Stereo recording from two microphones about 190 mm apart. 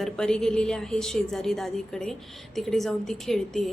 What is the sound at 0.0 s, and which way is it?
A woman's voice, 5° left (ahead or behind).